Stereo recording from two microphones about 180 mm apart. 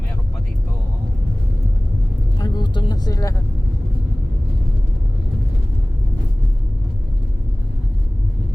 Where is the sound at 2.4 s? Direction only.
25° left (ahead or behind).